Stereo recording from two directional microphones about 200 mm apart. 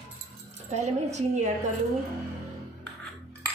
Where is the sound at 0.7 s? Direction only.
35° right (ahead or behind).